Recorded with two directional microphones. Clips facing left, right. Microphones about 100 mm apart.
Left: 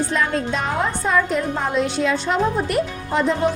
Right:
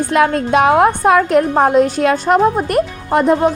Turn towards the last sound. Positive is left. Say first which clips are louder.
# right 7 dB
turn(degrees=-50)  # may be behind; listen again after turning